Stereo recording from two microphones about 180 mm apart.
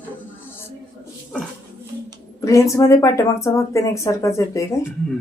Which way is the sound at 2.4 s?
15° left (ahead or behind).